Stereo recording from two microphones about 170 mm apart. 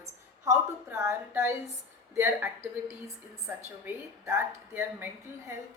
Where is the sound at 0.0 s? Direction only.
20° right (ahead or behind).